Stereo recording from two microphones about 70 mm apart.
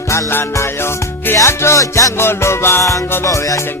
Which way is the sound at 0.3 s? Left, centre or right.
Left.